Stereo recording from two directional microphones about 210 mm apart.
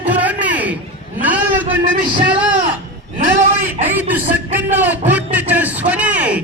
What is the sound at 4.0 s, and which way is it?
A man's voice, 10° right (ahead or behind).